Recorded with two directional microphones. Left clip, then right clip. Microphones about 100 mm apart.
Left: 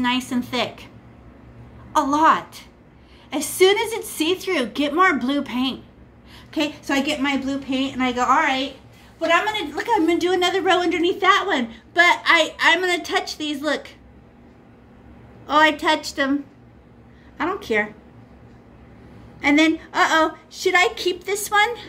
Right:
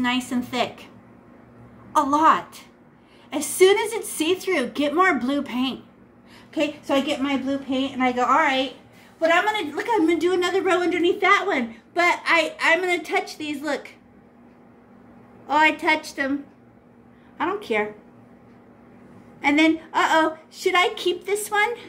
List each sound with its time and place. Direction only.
0.0 s a woman's voice: 5° left (ahead or behind)
1.9 s a woman's voice: 5° left (ahead or behind)
6.3 s a sound: 15° left (ahead or behind)
6.8 s a woman's voice: 30° left (ahead or behind)
7.2 s a woman's voice: 50° left (ahead or behind)
12.2 s a woman's voice: 55° left (ahead or behind)
15.6 s a woman's voice: 75° left (ahead or behind)
17.4 s a woman's voice: 65° left (ahead or behind)
19.4 s a woman's voice: 65° left (ahead or behind)
21.5 s a woman's voice: 75° left (ahead or behind)